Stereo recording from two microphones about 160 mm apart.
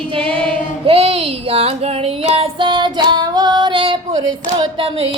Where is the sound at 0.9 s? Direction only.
40° right (ahead or behind).